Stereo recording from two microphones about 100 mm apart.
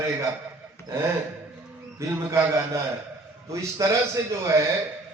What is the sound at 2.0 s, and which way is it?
A man's voice, 30° right (ahead or behind).